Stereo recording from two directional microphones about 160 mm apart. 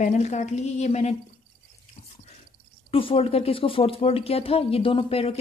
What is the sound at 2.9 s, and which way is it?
Speech, 35° left (ahead or behind).